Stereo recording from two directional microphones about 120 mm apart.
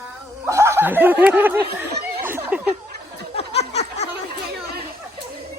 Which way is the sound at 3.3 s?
65° left (ahead or behind).